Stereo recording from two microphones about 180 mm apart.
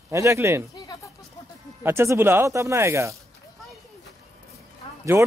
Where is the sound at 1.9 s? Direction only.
15° right (ahead or behind).